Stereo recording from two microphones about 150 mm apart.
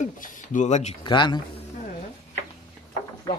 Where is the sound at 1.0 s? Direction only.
30° left (ahead or behind).